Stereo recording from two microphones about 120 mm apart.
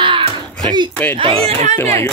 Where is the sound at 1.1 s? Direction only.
50° right (ahead or behind).